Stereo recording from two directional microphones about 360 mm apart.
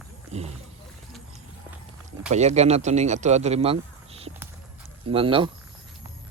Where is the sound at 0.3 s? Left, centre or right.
Centre.